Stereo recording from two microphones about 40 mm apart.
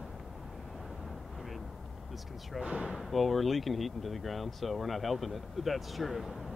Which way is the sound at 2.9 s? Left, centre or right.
Centre.